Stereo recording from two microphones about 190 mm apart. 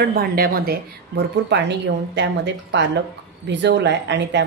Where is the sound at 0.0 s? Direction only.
55° right (ahead or behind).